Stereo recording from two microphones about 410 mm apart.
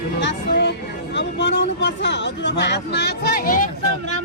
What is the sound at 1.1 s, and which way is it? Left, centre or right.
Speech, left.